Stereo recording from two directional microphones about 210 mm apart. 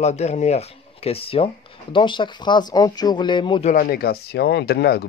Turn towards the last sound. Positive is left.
turn(degrees=50)  # may be behind; listen again after turning